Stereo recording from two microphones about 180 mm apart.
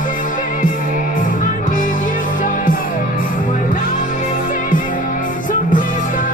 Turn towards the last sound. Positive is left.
turn(degrees=50)  # may be behind; listen again after turning